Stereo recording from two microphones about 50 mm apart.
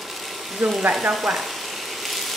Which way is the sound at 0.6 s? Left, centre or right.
Centre.